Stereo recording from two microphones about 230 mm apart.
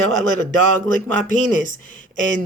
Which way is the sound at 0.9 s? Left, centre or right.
Left.